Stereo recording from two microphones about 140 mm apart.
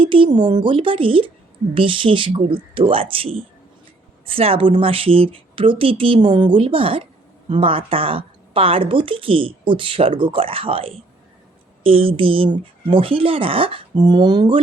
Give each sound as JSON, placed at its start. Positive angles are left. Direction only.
{"t": 0.0, "sound": "speech", "side_deg": -40}